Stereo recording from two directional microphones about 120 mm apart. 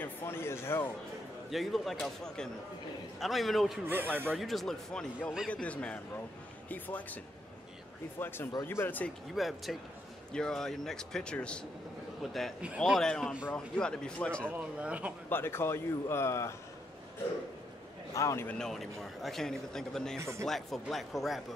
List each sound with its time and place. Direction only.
0.0 s a man's voice: 20° left (ahead or behind)
1.5 s a man's voice: centre (ahead or behind)
3.8 s speech: 15° right (ahead or behind)
4.4 s a man's voice: centre (ahead or behind)
8.2 s speech: 20° left (ahead or behind)
9.3 s a man's voice: centre (ahead or behind)
14.6 s speech: 10° right (ahead or behind)
15.2 s a man's voice: 20° left (ahead or behind)
18.1 s a man's voice: 25° left (ahead or behind)
18.5 s a man's voice: 5° left (ahead or behind)
20.2 s speech: 25° right (ahead or behind)
20.4 s a man's voice: centre (ahead or behind)